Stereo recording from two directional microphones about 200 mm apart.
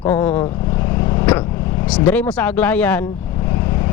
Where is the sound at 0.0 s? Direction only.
10° left (ahead or behind).